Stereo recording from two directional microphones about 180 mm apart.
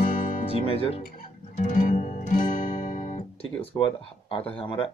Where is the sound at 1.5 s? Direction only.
45° left (ahead or behind).